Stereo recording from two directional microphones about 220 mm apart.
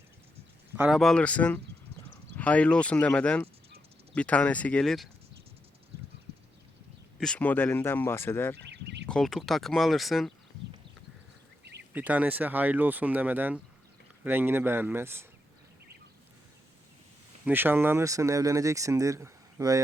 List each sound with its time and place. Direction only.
0.8 s speech: centre (ahead or behind)
7.2 s speech: 5° left (ahead or behind)
8.5 s a sound: 50° right (ahead or behind)
9.0 s speech: centre (ahead or behind)
11.9 s speech: 5° right (ahead or behind)
17.4 s speech: 10° right (ahead or behind)